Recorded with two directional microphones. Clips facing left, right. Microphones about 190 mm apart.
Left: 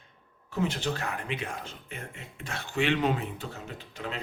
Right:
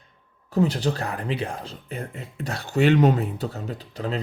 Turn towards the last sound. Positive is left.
turn(degrees=-35)  # may be behind; listen again after turning